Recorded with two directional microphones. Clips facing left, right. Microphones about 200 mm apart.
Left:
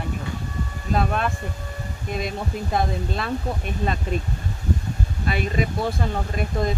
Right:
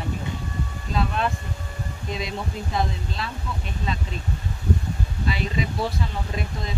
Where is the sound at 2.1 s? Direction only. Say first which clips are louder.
Left 3 dB; 50° left (ahead or behind).